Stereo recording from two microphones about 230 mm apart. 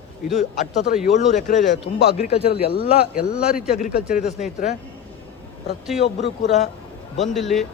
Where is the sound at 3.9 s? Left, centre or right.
Left.